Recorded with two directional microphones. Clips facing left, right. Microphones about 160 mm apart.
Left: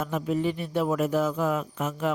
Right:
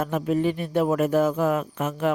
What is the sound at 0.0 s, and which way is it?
Speech, 55° right (ahead or behind).